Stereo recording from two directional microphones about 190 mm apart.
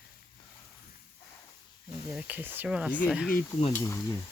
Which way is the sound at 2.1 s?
5° right (ahead or behind).